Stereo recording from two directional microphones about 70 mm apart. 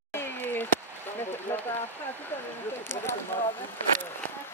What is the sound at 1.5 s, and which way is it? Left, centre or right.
Speech, left.